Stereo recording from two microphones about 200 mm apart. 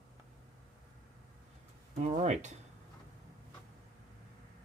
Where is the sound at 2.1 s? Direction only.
35° right (ahead or behind).